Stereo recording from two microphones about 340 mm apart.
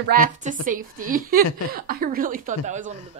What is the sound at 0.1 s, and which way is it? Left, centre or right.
A woman's voice, right.